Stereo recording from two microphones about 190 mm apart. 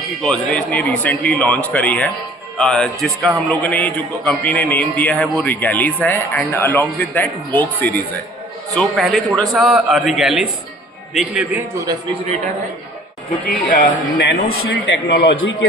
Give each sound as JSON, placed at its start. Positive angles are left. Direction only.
{"t": 0.2, "sound": "a man's voice", "side_deg": 5}
{"t": 13.7, "sound": "a man's voice", "side_deg": 60}